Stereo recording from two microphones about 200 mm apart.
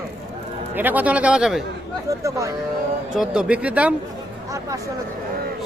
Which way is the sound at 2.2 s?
15° right (ahead or behind).